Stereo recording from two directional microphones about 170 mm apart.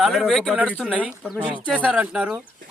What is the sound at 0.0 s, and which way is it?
Speech, centre (ahead or behind).